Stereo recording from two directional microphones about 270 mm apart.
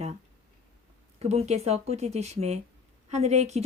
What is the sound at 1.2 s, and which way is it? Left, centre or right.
Speech, right.